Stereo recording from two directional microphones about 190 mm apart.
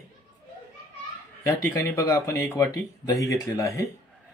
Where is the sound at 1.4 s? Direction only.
15° left (ahead or behind).